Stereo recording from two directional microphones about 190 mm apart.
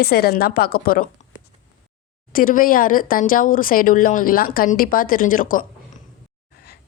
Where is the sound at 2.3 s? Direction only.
45° left (ahead or behind).